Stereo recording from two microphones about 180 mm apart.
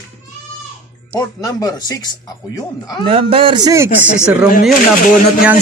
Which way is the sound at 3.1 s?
30° right (ahead or behind).